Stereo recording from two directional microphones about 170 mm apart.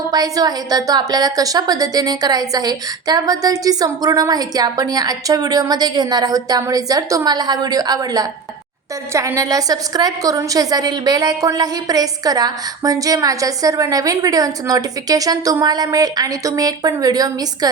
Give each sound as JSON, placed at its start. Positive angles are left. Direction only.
{"t": 0.1, "sound": "a woman's voice", "side_deg": -20}